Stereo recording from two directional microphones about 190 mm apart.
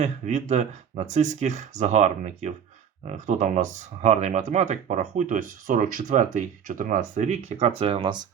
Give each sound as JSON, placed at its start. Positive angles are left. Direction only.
{"t": 0.0, "sound": "speech", "side_deg": -40}